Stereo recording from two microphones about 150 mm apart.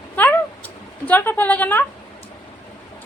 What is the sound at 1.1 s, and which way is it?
Speech, 10° left (ahead or behind).